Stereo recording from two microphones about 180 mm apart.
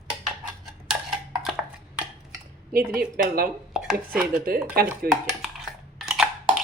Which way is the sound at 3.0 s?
55° right (ahead or behind).